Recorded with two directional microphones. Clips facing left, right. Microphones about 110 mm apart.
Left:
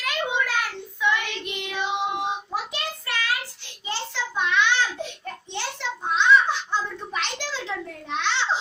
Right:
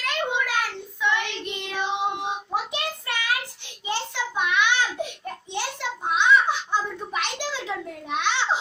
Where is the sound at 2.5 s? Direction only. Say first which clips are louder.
Right 2 dB; 20° right (ahead or behind).